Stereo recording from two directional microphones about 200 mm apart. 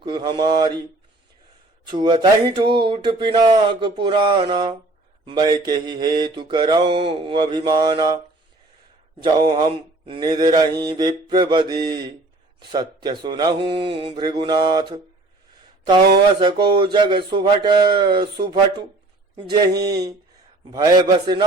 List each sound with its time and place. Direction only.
0.0 s mantra: 25° right (ahead or behind)
1.9 s mantra: 20° right (ahead or behind)
9.2 s mantra: 20° right (ahead or behind)
16.4 s mantra: 20° right (ahead or behind)